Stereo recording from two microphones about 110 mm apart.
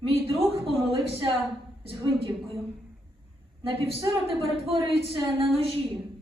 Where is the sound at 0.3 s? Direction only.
60° right (ahead or behind).